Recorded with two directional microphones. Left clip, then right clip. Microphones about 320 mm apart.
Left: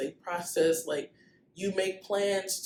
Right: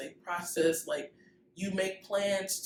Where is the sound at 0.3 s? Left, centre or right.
Centre.